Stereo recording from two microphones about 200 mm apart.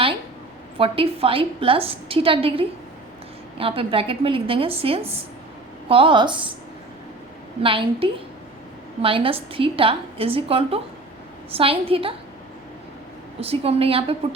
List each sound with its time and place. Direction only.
0.8 s a woman's voice: 25° right (ahead or behind)
7.6 s a woman's voice: 25° right (ahead or behind)
13.4 s a woman's voice: 30° right (ahead or behind)